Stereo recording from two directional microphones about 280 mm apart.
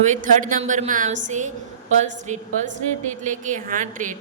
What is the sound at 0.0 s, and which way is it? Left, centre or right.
A woman's voice, right.